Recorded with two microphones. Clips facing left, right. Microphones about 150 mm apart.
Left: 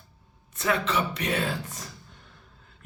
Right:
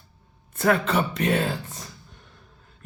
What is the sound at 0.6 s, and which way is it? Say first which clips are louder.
Speech: right 4 dB; 50° right (ahead or behind).